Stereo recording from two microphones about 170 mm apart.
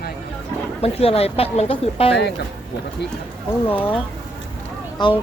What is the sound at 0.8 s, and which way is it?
Speech, 35° left (ahead or behind).